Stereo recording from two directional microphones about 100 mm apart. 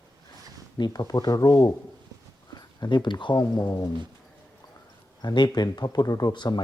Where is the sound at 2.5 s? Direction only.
45° left (ahead or behind).